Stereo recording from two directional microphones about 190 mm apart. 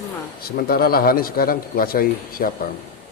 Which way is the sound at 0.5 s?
50° left (ahead or behind).